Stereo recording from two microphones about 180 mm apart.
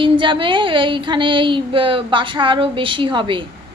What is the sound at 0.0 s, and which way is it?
Speech, 25° right (ahead or behind).